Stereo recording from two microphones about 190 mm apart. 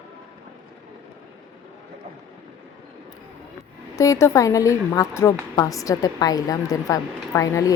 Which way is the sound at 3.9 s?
15° left (ahead or behind).